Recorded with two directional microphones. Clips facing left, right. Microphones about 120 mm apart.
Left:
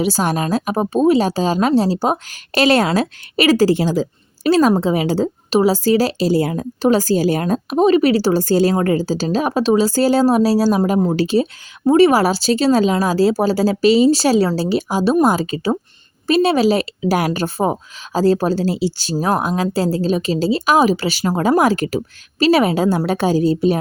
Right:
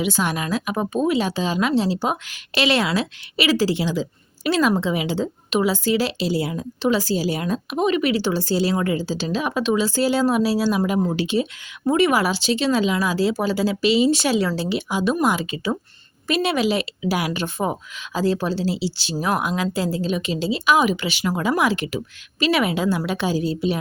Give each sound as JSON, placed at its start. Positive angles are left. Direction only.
{"t": 0.0, "sound": "a woman's voice", "side_deg": 40}